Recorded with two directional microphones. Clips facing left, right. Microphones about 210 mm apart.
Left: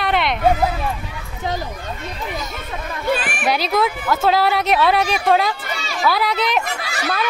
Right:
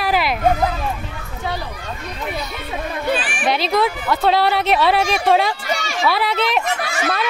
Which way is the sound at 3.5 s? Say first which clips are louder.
Right 1 dB; centre (ahead or behind).